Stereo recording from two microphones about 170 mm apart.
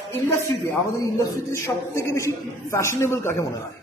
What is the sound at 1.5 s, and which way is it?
A man's voice, 15° left (ahead or behind).